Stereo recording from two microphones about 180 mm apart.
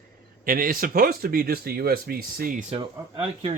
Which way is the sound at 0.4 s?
50° right (ahead or behind).